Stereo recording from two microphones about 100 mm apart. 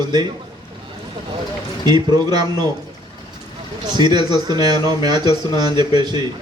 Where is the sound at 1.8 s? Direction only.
45° right (ahead or behind).